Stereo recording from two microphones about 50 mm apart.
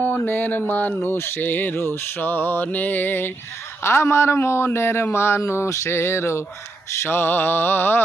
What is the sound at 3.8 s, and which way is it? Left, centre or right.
Speech, left.